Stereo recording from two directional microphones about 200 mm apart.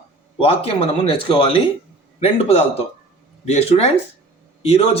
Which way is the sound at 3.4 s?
30° left (ahead or behind).